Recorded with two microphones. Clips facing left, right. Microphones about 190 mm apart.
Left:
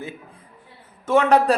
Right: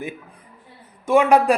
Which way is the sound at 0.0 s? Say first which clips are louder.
Right 3 dB; 15° right (ahead or behind).